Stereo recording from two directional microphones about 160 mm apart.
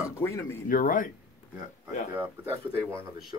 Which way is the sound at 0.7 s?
60° left (ahead or behind).